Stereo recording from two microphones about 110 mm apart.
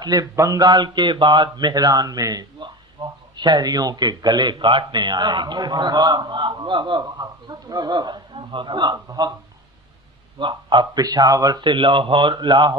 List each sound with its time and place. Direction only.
0.0 s a man's voice: 35° right (ahead or behind)
10.4 s speech: 45° right (ahead or behind)